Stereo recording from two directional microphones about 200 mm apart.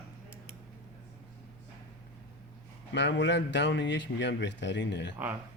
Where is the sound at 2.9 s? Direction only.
60° left (ahead or behind).